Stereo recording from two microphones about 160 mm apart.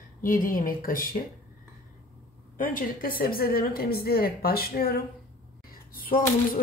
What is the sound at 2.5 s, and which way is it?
A woman's voice, 60° left (ahead or behind).